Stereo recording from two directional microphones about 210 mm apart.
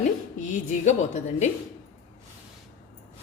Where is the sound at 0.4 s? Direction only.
35° left (ahead or behind).